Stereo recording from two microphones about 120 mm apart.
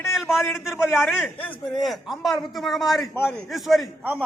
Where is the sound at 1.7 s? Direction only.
Centre (ahead or behind).